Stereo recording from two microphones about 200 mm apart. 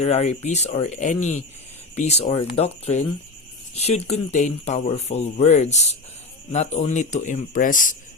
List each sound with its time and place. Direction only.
0.0 s speech: 30° left (ahead or behind)